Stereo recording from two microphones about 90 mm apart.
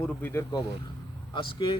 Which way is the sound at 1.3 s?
65° left (ahead or behind).